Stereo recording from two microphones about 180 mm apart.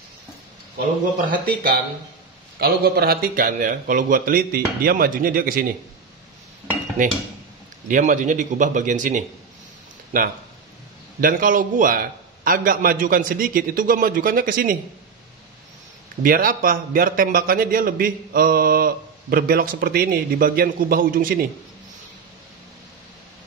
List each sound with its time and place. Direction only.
0.7 s a man's voice: 50° right (ahead or behind)
7.9 s a man's voice: 45° right (ahead or behind)
16.2 s a man's voice: 50° right (ahead or behind)